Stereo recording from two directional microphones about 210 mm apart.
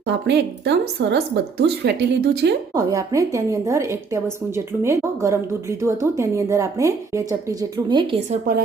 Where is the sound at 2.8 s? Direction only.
15° right (ahead or behind).